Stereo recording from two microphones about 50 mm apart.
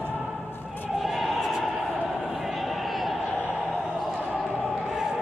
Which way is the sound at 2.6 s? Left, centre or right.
Centre.